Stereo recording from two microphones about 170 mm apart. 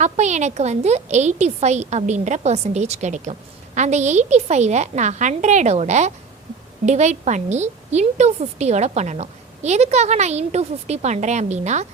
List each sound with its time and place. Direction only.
0.0 s a woman's voice: 45° right (ahead or behind)